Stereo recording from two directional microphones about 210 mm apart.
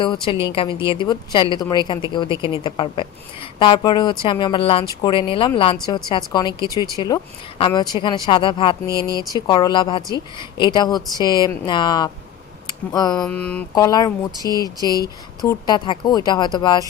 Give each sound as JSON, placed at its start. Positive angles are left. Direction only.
{"t": 0.0, "sound": "speech", "side_deg": 20}
{"t": 6.7, "sound": "speech", "side_deg": -15}
{"t": 6.9, "sound": "speech", "side_deg": 20}
{"t": 12.6, "sound": "a sound", "side_deg": 20}
{"t": 13.1, "sound": "mantra", "side_deg": 5}
{"t": 13.7, "sound": "mantra", "side_deg": 15}
{"t": 14.6, "sound": "speech", "side_deg": 20}